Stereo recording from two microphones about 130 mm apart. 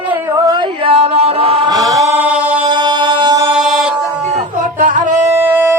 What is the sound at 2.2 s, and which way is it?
Singing, 10° right (ahead or behind).